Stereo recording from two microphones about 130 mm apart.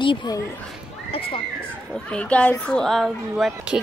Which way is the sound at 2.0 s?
10° left (ahead or behind).